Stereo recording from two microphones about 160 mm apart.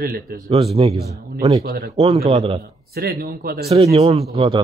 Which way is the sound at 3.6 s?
40° right (ahead or behind).